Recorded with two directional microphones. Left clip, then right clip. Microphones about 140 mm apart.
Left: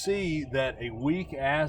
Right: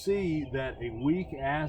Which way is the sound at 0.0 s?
30° left (ahead or behind).